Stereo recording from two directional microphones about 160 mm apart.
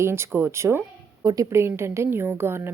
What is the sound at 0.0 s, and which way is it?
A woman's voice, 15° right (ahead or behind).